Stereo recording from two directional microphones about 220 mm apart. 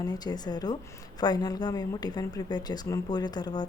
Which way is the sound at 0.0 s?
20° left (ahead or behind).